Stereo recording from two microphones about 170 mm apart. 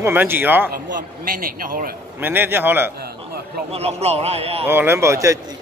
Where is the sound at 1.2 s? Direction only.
55° right (ahead or behind).